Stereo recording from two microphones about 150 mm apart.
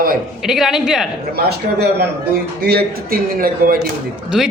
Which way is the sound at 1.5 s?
90° right.